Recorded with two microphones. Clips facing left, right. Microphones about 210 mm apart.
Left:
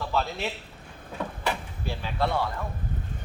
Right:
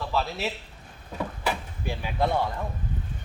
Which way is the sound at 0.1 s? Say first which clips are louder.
Even; 5° right (ahead or behind).